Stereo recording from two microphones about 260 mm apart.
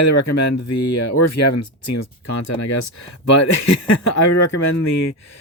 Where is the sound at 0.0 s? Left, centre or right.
Left.